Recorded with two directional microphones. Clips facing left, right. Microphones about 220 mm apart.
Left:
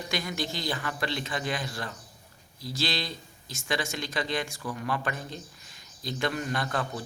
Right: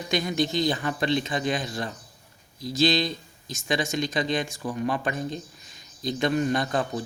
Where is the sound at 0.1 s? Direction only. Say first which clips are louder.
Right 9 dB; 20° right (ahead or behind).